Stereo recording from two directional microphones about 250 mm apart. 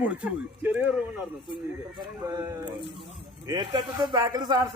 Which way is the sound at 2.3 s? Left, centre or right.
Centre.